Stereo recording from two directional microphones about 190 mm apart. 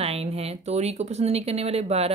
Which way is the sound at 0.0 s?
30° right (ahead or behind).